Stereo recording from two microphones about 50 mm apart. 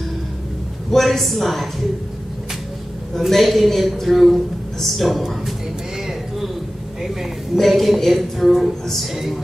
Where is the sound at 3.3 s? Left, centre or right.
Centre.